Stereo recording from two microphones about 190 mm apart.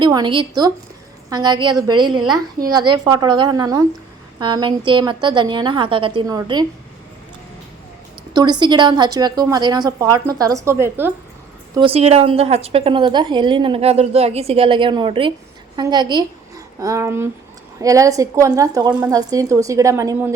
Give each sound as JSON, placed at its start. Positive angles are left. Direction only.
{"t": 0.0, "sound": "a woman's voice", "side_deg": -25}
{"t": 8.3, "sound": "a woman's voice", "side_deg": -20}
{"t": 11.7, "sound": "a woman's voice", "side_deg": -25}